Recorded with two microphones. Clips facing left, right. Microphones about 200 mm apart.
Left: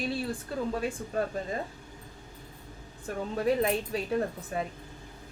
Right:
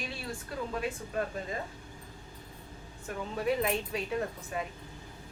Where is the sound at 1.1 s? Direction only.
35° left (ahead or behind).